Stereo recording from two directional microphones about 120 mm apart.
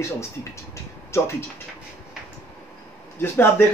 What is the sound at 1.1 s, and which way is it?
Speech, 20° left (ahead or behind).